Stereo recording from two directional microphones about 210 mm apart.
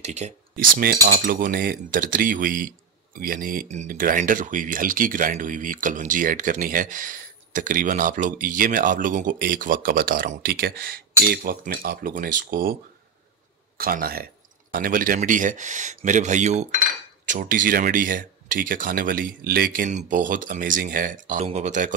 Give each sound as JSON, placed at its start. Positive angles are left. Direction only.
{"t": 0.0, "sound": "speech", "side_deg": -30}
{"t": 13.7, "sound": "speech", "side_deg": -45}